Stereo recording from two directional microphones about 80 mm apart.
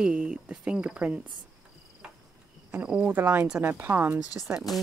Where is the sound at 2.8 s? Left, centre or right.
Centre.